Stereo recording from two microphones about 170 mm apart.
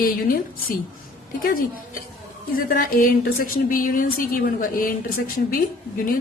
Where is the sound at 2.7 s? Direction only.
55° left (ahead or behind).